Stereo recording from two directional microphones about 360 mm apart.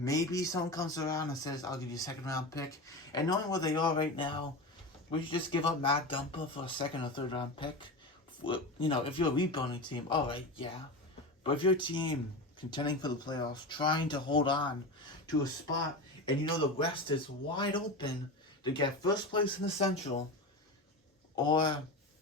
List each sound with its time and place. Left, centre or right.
0.0 s speech: centre
21.3 s speech: centre